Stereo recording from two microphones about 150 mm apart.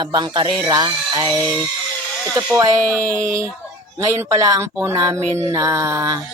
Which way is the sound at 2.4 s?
25° right (ahead or behind).